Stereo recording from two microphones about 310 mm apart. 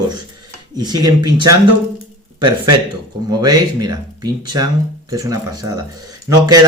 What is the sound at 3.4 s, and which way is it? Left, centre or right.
Speech, centre.